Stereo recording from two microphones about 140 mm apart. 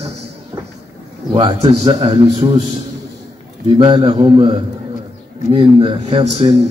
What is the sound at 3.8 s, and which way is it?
A man's voice, 35° right (ahead or behind).